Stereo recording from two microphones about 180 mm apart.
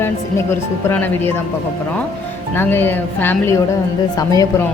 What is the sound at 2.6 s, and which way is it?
Speech, 10° left (ahead or behind).